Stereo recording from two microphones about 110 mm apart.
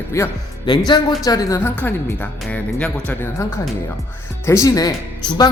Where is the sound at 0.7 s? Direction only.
40° left (ahead or behind).